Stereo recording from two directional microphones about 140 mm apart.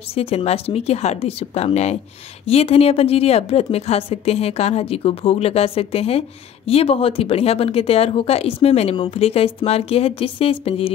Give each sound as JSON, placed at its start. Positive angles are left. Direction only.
{"t": 0.1, "sound": "a woman's voice", "side_deg": 45}